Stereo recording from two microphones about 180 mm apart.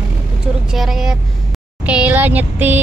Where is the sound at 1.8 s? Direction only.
10° right (ahead or behind).